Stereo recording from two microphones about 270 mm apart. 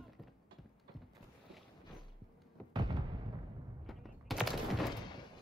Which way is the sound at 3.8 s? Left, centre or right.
Centre.